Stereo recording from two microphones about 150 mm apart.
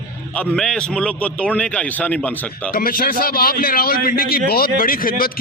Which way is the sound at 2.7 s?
75° left (ahead or behind).